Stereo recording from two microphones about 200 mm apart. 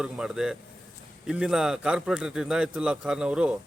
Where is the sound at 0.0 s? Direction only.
5° right (ahead or behind).